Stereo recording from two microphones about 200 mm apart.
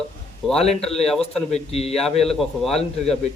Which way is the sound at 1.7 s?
30° left (ahead or behind).